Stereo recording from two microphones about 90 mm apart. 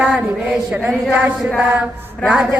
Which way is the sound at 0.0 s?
10° right (ahead or behind).